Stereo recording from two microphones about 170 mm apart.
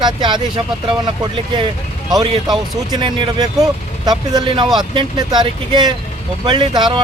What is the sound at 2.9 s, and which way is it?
Speech, 30° right (ahead or behind).